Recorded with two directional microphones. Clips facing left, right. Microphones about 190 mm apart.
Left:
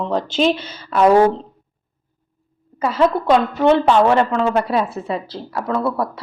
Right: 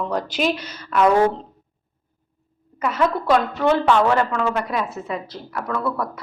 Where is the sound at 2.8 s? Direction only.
30° left (ahead or behind).